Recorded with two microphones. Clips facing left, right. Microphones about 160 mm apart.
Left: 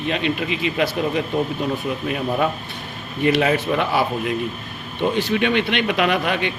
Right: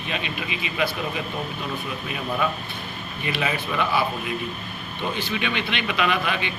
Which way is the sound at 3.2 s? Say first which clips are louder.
Left 9 dB; 60° left (ahead or behind).